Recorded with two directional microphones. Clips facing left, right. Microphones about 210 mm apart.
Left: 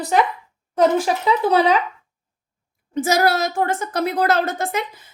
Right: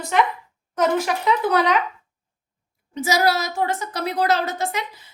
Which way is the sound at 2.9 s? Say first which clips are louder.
Left 2 dB; 50° left (ahead or behind).